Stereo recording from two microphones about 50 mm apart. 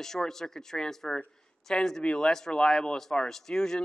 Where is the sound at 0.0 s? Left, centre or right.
Centre.